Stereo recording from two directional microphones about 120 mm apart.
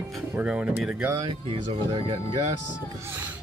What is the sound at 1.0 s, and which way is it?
Speech, 25° right (ahead or behind).